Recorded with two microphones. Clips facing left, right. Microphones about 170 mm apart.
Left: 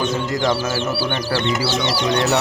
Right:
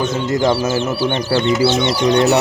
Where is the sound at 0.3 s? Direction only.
25° right (ahead or behind).